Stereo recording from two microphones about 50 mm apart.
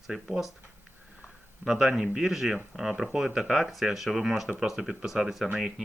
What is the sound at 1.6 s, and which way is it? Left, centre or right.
Speech, centre.